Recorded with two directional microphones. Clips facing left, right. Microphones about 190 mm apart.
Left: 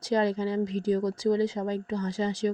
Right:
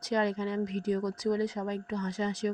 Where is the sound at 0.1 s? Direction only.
30° left (ahead or behind).